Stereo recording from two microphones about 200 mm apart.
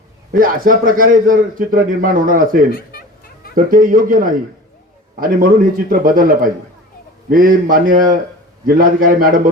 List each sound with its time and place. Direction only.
0.3 s a man's voice: 45° right (ahead or behind)